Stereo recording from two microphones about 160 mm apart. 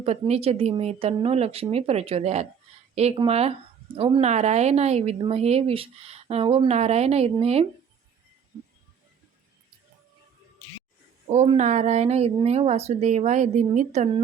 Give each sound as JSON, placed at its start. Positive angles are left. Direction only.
{"t": 0.0, "sound": "speech", "side_deg": -40}
{"t": 11.3, "sound": "speech", "side_deg": -40}